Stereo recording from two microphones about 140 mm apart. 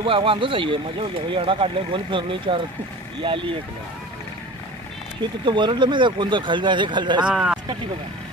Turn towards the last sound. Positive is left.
turn(degrees=-5)  # may be behind; listen again after turning